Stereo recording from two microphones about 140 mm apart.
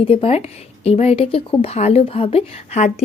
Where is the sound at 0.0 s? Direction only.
45° left (ahead or behind).